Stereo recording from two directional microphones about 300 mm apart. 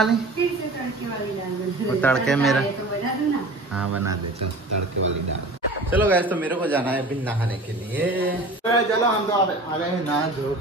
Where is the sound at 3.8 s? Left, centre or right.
Right.